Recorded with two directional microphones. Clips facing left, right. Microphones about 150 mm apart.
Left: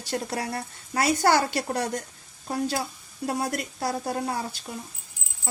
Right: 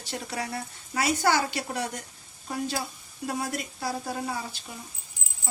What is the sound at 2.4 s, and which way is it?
A woman's voice, 40° left (ahead or behind).